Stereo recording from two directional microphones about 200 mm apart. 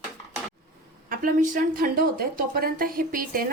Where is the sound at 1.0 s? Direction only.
45° right (ahead or behind).